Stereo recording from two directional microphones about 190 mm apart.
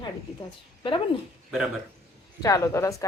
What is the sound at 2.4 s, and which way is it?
Speech, 15° left (ahead or behind).